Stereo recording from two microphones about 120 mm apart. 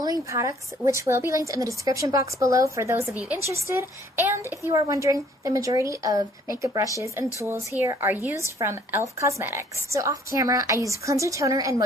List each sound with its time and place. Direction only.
0.0 s a woman's voice: 30° right (ahead or behind)